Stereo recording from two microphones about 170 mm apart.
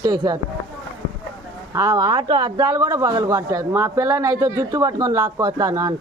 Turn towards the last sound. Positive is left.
turn(degrees=-20)  # may be behind; listen again after turning